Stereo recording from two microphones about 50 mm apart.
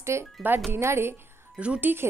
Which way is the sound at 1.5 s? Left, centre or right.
Right.